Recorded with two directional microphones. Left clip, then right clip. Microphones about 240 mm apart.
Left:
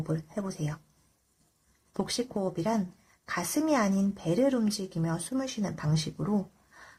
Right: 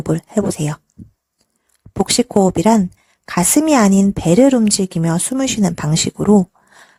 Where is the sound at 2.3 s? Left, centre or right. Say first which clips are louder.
Right 18 dB; right.